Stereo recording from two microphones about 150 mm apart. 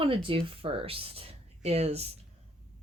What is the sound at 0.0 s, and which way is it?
Speech, 35° right (ahead or behind).